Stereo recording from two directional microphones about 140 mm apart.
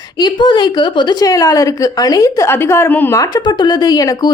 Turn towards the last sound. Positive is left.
turn(degrees=25)  # may be behind; listen again after turning